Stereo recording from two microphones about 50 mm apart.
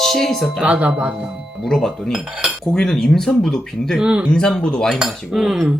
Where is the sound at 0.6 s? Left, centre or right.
Right.